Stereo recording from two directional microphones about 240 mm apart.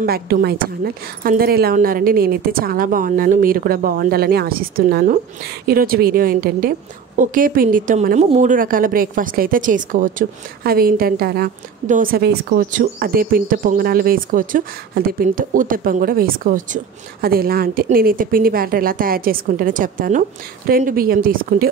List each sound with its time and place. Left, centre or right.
0.0 s a woman's voice: right